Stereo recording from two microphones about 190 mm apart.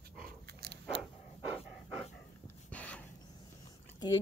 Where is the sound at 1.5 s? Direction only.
5° right (ahead or behind).